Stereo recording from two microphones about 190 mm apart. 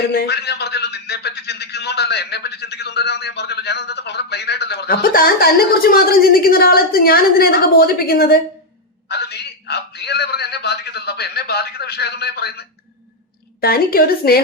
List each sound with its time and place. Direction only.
0.1 s a man's voice: 60° left (ahead or behind)